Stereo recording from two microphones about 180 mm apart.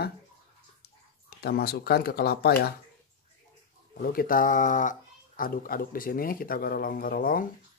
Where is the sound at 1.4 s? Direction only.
60° left (ahead or behind).